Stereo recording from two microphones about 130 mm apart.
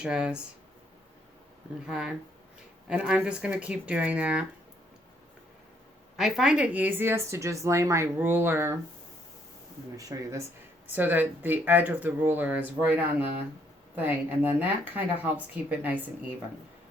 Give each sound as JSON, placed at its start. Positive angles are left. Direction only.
{"t": 0.0, "sound": "speech", "side_deg": -5}
{"t": 1.9, "sound": "speech", "side_deg": -5}
{"t": 6.1, "sound": "speech", "side_deg": 0}
{"t": 10.0, "sound": "speech", "side_deg": -25}
{"t": 10.9, "sound": "speech", "side_deg": -15}